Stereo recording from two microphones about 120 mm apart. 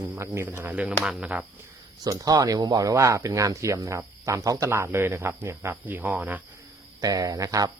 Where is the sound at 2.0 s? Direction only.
30° right (ahead or behind); by 6.4 s 15° right (ahead or behind).